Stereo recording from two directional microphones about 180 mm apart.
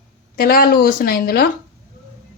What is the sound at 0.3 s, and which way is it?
Speech, 55° left (ahead or behind).